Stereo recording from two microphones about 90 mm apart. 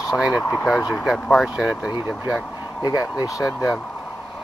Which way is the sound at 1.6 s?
10° right (ahead or behind).